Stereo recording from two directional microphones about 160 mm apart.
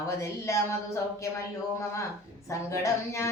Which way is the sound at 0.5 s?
20° left (ahead or behind).